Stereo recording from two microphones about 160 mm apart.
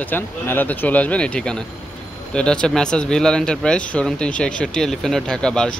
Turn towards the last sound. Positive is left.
turn(degrees=5)  # may be behind; listen again after turning